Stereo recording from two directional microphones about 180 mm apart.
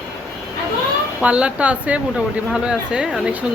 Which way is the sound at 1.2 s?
5° right (ahead or behind).